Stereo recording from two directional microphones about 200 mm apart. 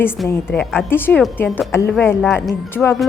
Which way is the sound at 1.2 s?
Centre (ahead or behind).